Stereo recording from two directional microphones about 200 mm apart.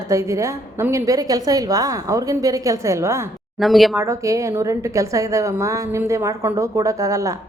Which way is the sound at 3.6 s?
Centre (ahead or behind).